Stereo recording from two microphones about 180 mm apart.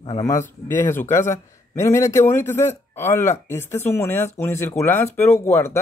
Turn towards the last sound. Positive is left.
turn(degrees=15)  # may be behind; listen again after turning